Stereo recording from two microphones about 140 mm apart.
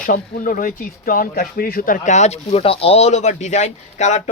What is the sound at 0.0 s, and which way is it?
Speech, 75° left (ahead or behind).